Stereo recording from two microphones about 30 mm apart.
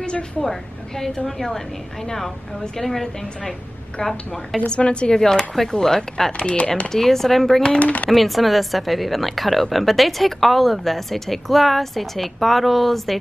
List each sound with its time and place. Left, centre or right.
0.4 s a woman's voice: centre
2.8 s a woman's voice: centre
4.7 s speech: left
5.1 s a woman's voice: centre
6.3 s speech: left
6.9 s a woman's voice: centre
7.8 s speech: left
8.1 s a woman's voice: centre